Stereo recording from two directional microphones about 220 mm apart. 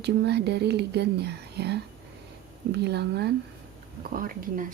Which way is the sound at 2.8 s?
50° right (ahead or behind).